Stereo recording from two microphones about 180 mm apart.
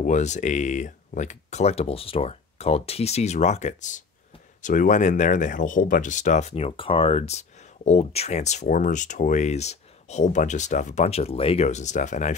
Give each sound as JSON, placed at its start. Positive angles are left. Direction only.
{"t": 0.0, "sound": "speech", "side_deg": 40}